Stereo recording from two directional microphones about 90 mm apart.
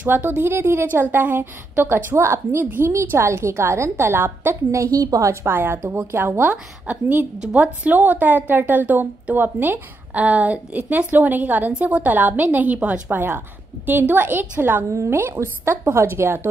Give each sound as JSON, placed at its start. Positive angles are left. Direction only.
{"t": 0.0, "sound": "a woman's voice", "side_deg": -20}